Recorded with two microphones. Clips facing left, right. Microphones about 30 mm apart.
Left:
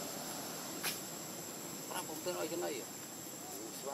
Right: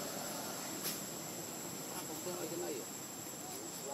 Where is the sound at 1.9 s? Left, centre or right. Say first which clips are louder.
Left 5 dB; left.